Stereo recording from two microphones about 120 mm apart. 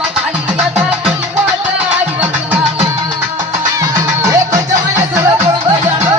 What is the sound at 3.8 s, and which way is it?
Music, 30° right (ahead or behind).